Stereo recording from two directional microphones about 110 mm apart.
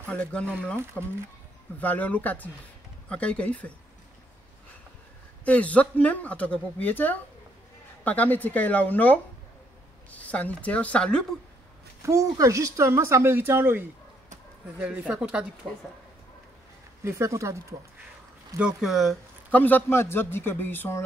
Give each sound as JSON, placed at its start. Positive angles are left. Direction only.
{"t": 0.1, "sound": "a woman's voice", "side_deg": 10}
{"t": 5.4, "sound": "a woman's voice", "side_deg": 10}
{"t": 12.0, "sound": "speech", "side_deg": -25}
{"t": 17.0, "sound": "speech", "side_deg": -25}
{"t": 18.6, "sound": "speech", "side_deg": -5}
{"t": 19.5, "sound": "a man's voice", "side_deg": 15}